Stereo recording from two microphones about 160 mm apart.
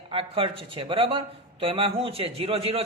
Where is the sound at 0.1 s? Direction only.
35° right (ahead or behind).